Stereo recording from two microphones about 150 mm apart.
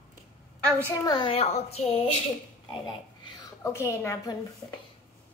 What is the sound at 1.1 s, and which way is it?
A child's voice, 35° left (ahead or behind).